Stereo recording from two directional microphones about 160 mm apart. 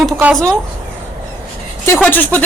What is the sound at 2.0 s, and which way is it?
Speech, 10° left (ahead or behind).